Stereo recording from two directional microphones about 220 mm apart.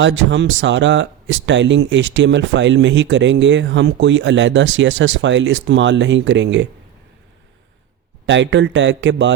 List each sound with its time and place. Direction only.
0.0 s speech: 55° right (ahead or behind)
8.3 s speech: 55° right (ahead or behind)